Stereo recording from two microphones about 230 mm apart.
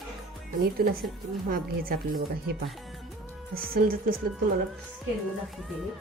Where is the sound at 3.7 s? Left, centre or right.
Right.